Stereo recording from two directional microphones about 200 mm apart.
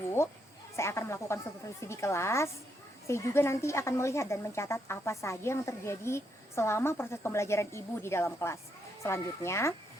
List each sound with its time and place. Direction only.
0.2 s a woman's voice: 15° left (ahead or behind)